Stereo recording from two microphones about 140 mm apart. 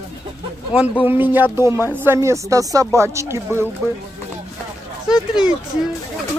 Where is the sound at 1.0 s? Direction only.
15° right (ahead or behind).